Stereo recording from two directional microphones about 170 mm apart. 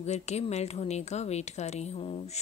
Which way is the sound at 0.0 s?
40° left (ahead or behind).